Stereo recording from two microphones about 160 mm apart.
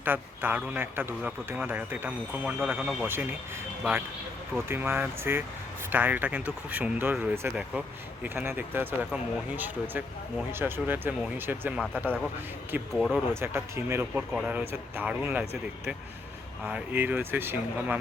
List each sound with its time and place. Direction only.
0.0 s speech: 10° right (ahead or behind)
4.7 s speech: 15° right (ahead or behind)
12.9 s speech: centre (ahead or behind)
13.3 s speech: 15° right (ahead or behind)
16.6 s speech: 10° right (ahead or behind)